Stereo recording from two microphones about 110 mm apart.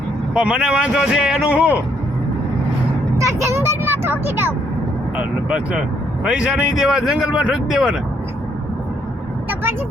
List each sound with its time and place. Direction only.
0.3 s speech: 10° right (ahead or behind)
3.2 s a sound: 25° right (ahead or behind)
5.1 s speech: 10° right (ahead or behind)